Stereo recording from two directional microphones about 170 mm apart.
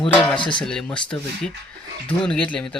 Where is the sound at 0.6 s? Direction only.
5° left (ahead or behind).